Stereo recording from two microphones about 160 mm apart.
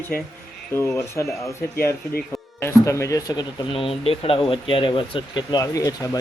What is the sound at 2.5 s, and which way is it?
Speech, 15° left (ahead or behind).